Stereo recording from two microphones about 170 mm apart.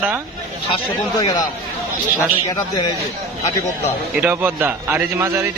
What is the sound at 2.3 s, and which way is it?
Speech, 25° left (ahead or behind).